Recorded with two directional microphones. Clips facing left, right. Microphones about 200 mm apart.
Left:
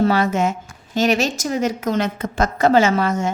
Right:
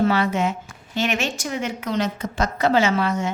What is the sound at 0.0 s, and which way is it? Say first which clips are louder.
A woman's voice: left 3 dB; 40° left (ahead or behind).